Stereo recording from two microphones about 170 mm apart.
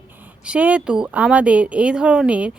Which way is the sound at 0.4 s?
5° right (ahead or behind).